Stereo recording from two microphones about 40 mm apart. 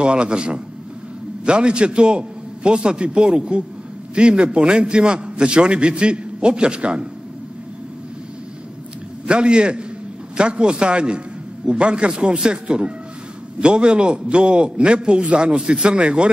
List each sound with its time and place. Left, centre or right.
0.0 s a man's voice: right
9.3 s a man's voice: right